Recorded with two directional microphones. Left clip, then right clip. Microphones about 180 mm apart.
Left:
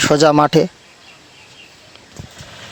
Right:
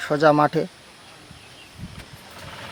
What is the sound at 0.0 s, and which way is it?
Speech, 50° left (ahead or behind).